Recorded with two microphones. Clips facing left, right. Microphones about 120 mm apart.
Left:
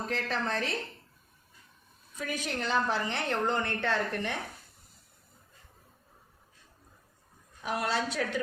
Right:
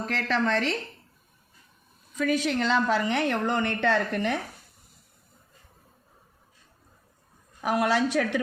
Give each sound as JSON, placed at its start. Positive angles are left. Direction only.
{"t": 0.0, "sound": "a woman's voice", "side_deg": -90}
{"t": 2.1, "sound": "a woman's voice", "side_deg": -90}
{"t": 7.6, "sound": "a woman's voice", "side_deg": -90}